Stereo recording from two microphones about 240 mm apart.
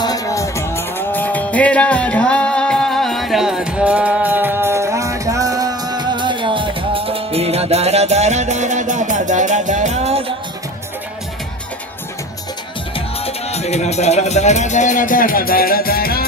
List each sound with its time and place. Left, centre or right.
0.0 s music: centre; by 10.3 s right
13.1 s speech: left